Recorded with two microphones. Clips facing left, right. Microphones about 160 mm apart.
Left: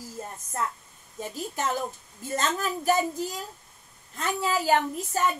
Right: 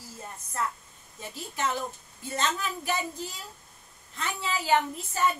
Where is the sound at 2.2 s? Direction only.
45° left (ahead or behind).